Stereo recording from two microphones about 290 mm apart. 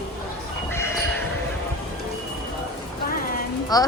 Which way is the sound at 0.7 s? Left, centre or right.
Centre.